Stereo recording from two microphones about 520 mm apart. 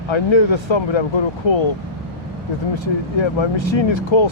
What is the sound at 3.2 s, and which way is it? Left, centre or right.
Speech, left.